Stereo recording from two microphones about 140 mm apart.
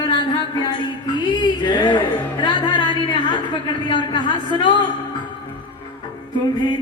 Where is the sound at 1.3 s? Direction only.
30° left (ahead or behind).